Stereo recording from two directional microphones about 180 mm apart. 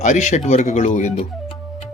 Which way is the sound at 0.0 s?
40° left (ahead or behind).